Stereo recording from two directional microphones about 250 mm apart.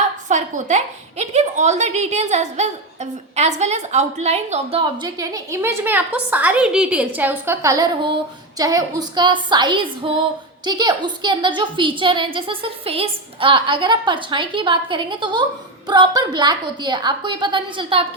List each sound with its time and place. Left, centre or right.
0.3 s a woman's voice: right